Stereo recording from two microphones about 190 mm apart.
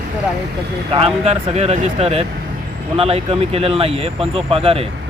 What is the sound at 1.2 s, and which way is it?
Speech, 35° right (ahead or behind).